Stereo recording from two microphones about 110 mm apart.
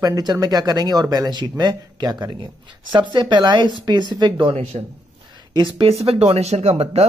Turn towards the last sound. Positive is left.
turn(degrees=-70)  # may be behind; listen again after turning